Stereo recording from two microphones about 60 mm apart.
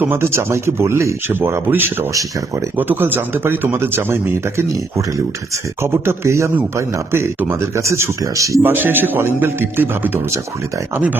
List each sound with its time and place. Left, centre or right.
0.2 s speech: right
8.2 s speech: right
8.6 s speech: right